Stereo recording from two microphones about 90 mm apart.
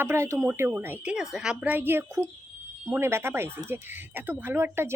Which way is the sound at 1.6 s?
20° right (ahead or behind).